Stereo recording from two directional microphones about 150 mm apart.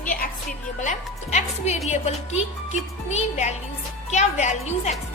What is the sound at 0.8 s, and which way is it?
A woman's voice, 55° left (ahead or behind).